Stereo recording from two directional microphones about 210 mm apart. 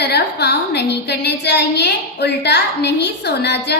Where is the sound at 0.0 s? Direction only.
50° left (ahead or behind).